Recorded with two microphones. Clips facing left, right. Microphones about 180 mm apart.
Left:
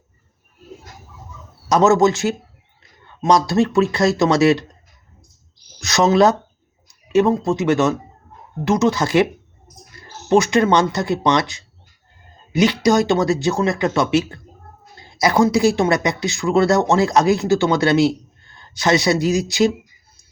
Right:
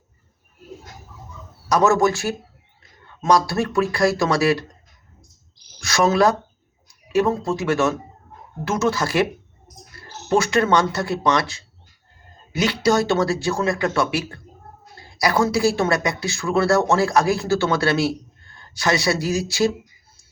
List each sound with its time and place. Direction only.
1.7 s speech: 20° left (ahead or behind)
5.8 s speech: 20° left (ahead or behind)
10.2 s speech: 20° left (ahead or behind)